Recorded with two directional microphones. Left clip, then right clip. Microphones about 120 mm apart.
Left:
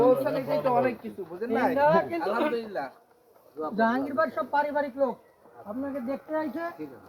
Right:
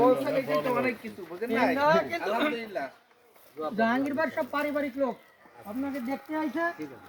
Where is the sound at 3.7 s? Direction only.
15° left (ahead or behind).